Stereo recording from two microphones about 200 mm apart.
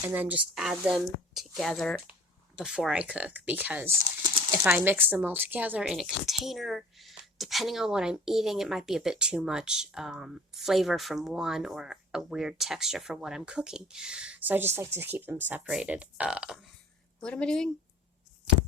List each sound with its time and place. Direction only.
0.1 s speech: 10° right (ahead or behind)
4.2 s a sound: 20° right (ahead or behind)
4.6 s speech: 10° right (ahead or behind)